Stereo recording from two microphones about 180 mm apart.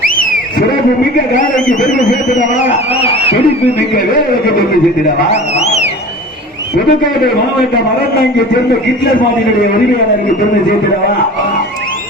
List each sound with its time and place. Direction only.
1.6 s speech: 45° left (ahead or behind)
2.9 s speech: 30° left (ahead or behind)
5.3 s a sound: 35° left (ahead or behind)